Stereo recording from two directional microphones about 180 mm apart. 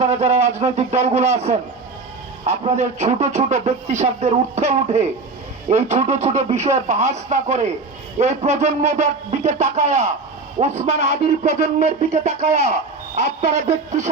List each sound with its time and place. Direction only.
0.0 s speech: 35° right (ahead or behind)
2.4 s speech: 40° right (ahead or behind)